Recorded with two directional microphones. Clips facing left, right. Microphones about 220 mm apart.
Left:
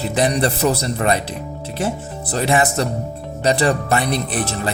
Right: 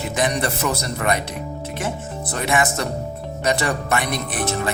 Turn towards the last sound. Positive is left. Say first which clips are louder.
# left 4 dB
turn(degrees=30)  # may be behind; listen again after turning